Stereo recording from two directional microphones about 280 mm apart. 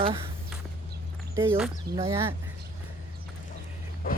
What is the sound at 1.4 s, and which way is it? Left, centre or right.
Speech, centre.